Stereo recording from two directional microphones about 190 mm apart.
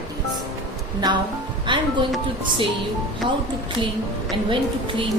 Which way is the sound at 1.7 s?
25° right (ahead or behind).